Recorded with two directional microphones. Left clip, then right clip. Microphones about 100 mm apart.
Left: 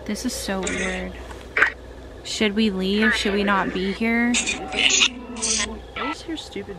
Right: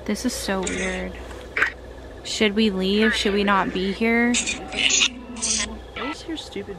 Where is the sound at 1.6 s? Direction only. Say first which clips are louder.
Left 3 dB; 20° left (ahead or behind).